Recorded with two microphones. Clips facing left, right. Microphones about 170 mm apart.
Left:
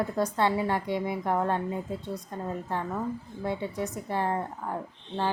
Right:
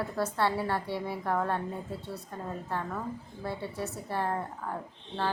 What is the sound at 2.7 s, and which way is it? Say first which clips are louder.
Speech: left 3 dB; 15° left (ahead or behind).